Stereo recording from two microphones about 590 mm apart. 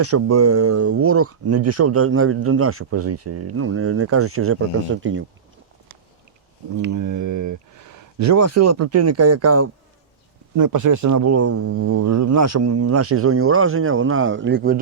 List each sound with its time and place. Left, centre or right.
0.0 s speech: right
6.7 s speech: right